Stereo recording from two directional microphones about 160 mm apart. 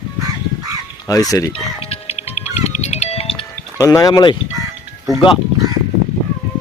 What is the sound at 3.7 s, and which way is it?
Speech, 20° left (ahead or behind).